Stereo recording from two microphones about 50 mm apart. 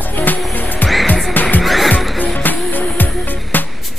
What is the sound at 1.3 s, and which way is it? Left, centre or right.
Music, left.